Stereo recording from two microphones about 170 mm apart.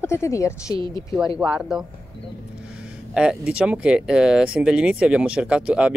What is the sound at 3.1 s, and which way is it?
Speech, 5° right (ahead or behind).